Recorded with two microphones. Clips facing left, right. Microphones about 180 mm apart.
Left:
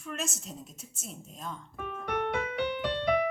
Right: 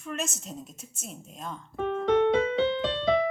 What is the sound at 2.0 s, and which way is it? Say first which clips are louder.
Music: right 9 dB; 25° right (ahead or behind).